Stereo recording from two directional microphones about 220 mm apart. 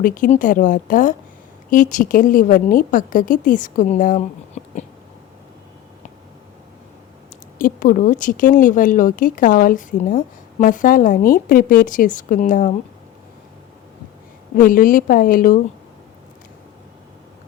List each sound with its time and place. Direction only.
0.0 s speech: 40° left (ahead or behind)
7.6 s speech: 40° left (ahead or behind)
14.5 s speech: 40° left (ahead or behind)